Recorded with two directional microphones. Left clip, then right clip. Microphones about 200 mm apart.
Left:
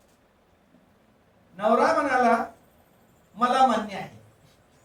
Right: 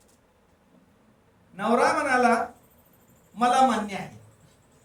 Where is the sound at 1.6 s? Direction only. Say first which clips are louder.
Left 1 dB; 15° right (ahead or behind).